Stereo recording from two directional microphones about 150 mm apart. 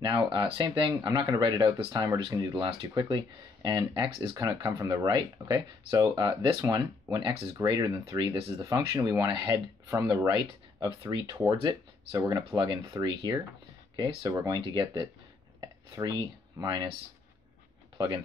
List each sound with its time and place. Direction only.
0.0 s speech: 30° right (ahead or behind)
15.6 s a sound: 25° right (ahead or behind)
17.9 s speech: 30° right (ahead or behind)